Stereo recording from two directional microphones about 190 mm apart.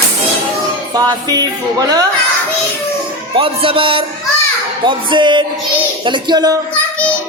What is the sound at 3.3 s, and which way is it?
Music, 30° right (ahead or behind).